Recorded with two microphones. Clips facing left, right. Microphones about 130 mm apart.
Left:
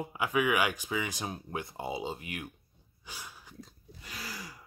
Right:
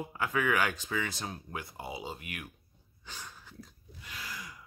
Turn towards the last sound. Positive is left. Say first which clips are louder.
# left 1 dB
turn(degrees=35)  # may be behind; listen again after turning